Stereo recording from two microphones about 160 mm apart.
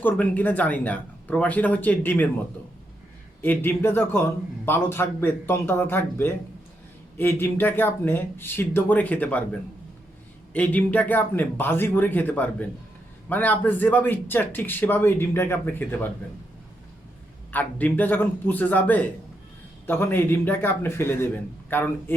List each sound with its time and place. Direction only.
0.0 s a man's voice: 10° left (ahead or behind)
3.4 s a man's voice: 10° left (ahead or behind)
10.5 s a man's voice: 10° left (ahead or behind)
17.5 s a man's voice: 10° left (ahead or behind)